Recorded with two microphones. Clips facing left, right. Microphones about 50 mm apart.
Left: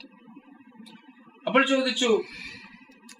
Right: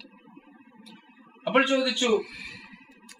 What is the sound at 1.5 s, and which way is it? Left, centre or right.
Speech, centre.